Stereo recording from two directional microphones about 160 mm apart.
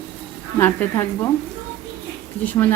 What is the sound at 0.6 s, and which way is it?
Speech, 15° left (ahead or behind).